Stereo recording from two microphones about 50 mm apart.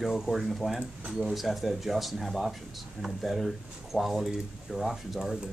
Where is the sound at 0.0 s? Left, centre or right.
Centre.